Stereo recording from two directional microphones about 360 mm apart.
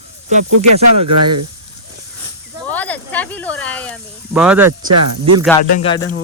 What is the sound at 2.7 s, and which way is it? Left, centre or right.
Snake, centre.